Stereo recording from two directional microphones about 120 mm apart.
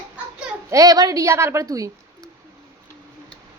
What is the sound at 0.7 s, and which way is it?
A woman's voice, 30° right (ahead or behind).